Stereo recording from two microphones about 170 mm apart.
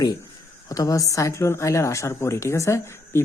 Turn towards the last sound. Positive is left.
turn(degrees=15)  # may be behind; listen again after turning